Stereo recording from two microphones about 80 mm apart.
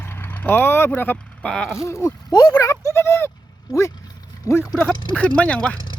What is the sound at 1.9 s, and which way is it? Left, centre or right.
Speech, left.